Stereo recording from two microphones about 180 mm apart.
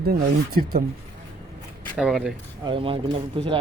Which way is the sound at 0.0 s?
60° right (ahead or behind).